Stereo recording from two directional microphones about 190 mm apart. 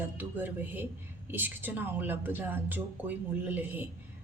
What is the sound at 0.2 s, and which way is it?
A woman's voice, 10° right (ahead or behind).